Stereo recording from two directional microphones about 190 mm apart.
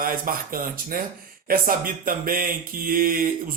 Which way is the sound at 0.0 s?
50° right (ahead or behind).